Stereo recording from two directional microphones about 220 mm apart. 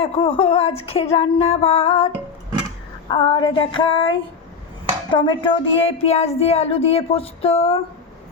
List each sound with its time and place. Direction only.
0.0 s speech: 25° left (ahead or behind)
3.1 s speech: 20° left (ahead or behind)